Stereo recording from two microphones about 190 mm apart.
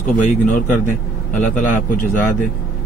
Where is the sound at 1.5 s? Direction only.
45° left (ahead or behind).